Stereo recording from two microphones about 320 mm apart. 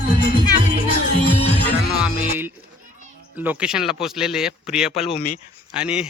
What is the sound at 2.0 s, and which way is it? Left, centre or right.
Music, centre.